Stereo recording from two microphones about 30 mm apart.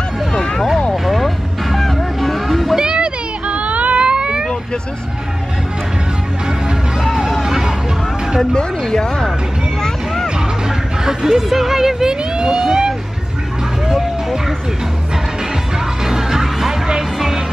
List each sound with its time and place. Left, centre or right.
0.3 s vehicle: left
0.9 s vehicle: centre
2.8 s a sound: right
3.4 s a sound: right
6.4 s music: right
7.1 s music: centre
8.5 s a sound: left
9.8 s vehicle: centre
11.2 s music: centre; by 12.5 s right
12.5 s vehicle: centre
13.8 s music: centre
16.0 s music: centre